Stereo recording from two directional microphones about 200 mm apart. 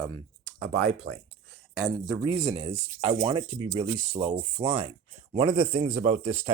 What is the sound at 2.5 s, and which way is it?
Speech, 25° right (ahead or behind).